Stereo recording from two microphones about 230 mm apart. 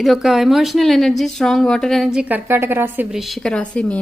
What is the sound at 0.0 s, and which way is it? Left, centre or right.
A woman's voice, centre.